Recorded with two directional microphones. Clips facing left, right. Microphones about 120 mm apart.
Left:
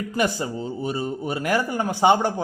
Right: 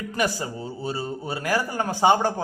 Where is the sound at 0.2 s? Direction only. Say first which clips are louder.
Left 2 dB; 20° left (ahead or behind).